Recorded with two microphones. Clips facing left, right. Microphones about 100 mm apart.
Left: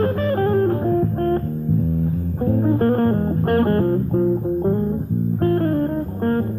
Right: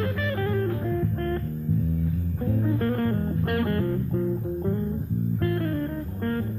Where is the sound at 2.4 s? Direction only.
40° left (ahead or behind).